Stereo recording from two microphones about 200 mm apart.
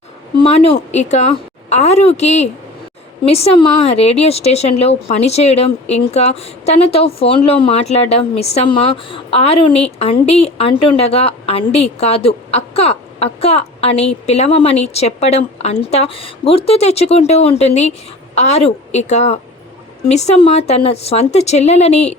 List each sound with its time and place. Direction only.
0.3 s speech: 30° left (ahead or behind)